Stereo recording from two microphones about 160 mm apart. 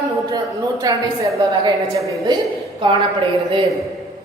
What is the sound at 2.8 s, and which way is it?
Speech, 30° right (ahead or behind).